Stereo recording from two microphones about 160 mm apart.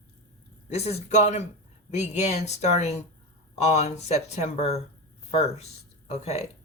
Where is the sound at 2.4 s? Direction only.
45° left (ahead or behind).